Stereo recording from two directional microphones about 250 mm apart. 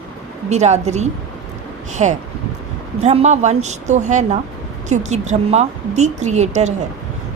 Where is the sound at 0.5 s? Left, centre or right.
Right.